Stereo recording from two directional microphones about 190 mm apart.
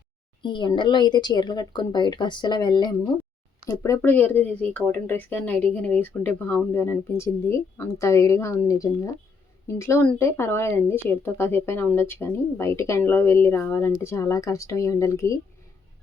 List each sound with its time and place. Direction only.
0.4 s speech: 25° left (ahead or behind)